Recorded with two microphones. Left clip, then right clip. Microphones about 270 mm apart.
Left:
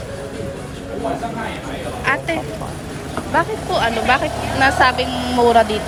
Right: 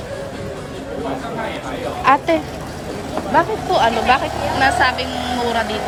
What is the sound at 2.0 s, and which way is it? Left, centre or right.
A woman's voice, centre.